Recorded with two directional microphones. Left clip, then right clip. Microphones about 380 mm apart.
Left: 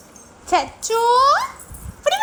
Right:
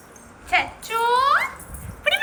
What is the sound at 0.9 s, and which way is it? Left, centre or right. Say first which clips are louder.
Speech: left 4 dB; centre.